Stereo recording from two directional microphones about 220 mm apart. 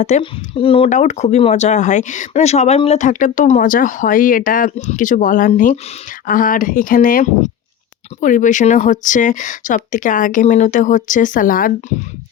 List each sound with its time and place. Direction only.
0.0 s speech: 30° left (ahead or behind)